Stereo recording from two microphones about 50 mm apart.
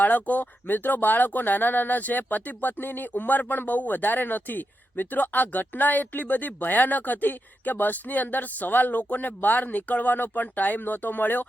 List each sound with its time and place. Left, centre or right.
0.0 s speech: left